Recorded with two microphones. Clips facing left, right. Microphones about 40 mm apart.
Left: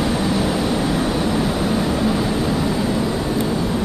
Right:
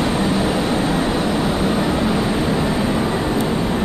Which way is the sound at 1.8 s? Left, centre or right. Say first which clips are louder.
Right 1 dB; right.